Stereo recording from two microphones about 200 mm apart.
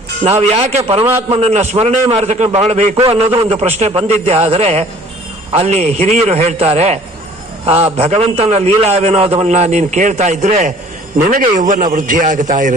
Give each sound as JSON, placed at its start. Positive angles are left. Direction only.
{"t": 0.3, "sound": "a man's voice", "side_deg": -30}